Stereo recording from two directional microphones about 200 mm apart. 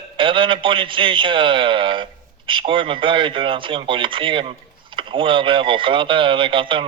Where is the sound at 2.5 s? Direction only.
25° right (ahead or behind).